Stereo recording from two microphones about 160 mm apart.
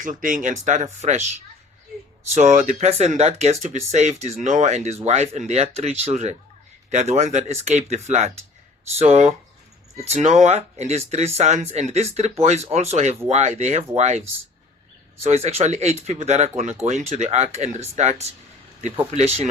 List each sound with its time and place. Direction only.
0.0 s speech: 55° right (ahead or behind)